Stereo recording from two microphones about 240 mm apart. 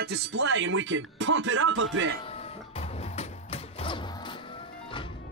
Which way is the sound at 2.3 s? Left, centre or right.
Left.